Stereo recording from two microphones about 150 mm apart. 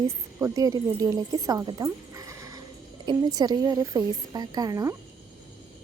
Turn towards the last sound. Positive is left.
turn(degrees=-20)  # may be behind; listen again after turning